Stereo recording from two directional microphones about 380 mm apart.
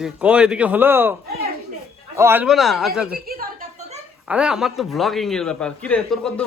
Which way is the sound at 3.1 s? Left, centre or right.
Right.